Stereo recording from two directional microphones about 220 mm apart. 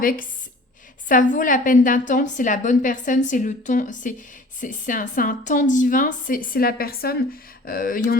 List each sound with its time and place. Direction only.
0.0 s a woman's voice: 40° left (ahead or behind)